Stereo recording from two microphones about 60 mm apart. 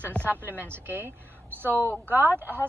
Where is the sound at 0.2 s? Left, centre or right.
Right.